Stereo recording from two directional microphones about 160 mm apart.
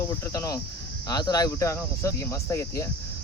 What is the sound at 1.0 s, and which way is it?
Speech, 25° left (ahead or behind).